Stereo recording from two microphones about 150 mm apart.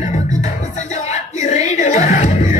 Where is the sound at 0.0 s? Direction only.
50° left (ahead or behind).